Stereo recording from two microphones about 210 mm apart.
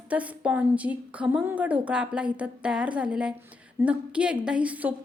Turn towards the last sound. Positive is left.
turn(degrees=-5)  # may be behind; listen again after turning